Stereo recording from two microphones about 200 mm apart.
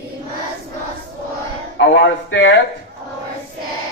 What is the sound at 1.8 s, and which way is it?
Speech, 60° left (ahead or behind).